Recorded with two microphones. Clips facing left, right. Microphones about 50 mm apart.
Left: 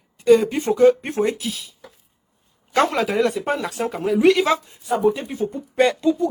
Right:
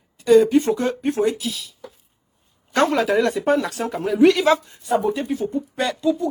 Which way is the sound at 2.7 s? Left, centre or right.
Centre.